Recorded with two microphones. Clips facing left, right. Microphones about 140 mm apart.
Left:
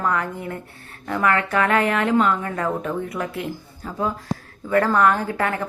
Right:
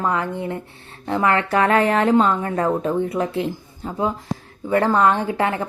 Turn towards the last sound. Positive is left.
turn(degrees=-25)  # may be behind; listen again after turning